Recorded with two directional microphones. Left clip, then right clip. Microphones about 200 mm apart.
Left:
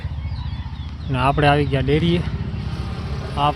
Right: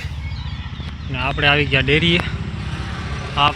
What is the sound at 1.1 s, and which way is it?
Speech, 40° left (ahead or behind).